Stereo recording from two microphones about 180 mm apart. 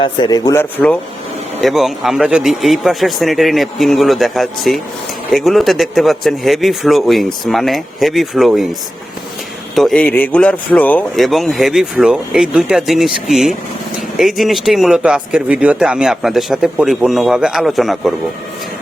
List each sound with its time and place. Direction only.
0.0 s speech: 25° left (ahead or behind)
1.6 s speech: centre (ahead or behind)
9.7 s speech: 5° left (ahead or behind)